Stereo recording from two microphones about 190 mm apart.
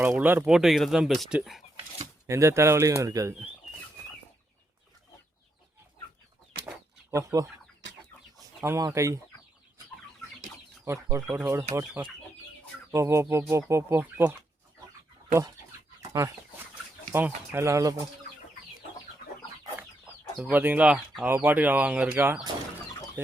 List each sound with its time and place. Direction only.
0.0 s speech: 10° right (ahead or behind)
2.2 s speech: 15° right (ahead or behind)
7.1 s speech: 15° right (ahead or behind)
8.6 s speech: 15° right (ahead or behind)
10.8 s speech: 15° right (ahead or behind)
16.1 s speech: 15° right (ahead or behind)
20.4 s speech: 10° right (ahead or behind)